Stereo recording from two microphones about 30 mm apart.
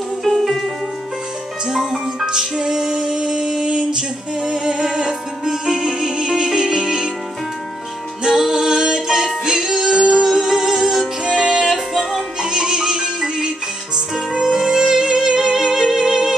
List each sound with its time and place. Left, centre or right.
0.2 s music: centre
1.7 s speech: centre
2.2 s music: right
8.4 s music: centre
11.7 s music: centre
12.4 s music: right